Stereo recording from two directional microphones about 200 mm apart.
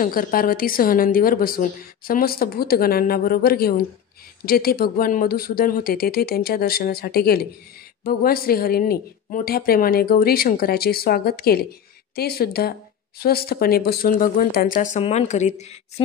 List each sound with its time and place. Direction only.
0.0 s speech: 45° left (ahead or behind)